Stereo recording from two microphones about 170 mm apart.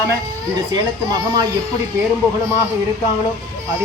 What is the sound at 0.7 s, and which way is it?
Speech, 25° right (ahead or behind).